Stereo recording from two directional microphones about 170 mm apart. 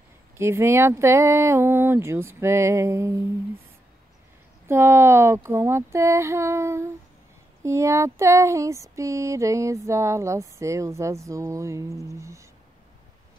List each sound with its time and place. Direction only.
0.4 s female singing: 15° right (ahead or behind)
4.6 s female singing: 15° right (ahead or behind)